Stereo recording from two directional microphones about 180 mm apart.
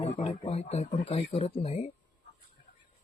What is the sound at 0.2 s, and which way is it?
Speech, 35° left (ahead or behind).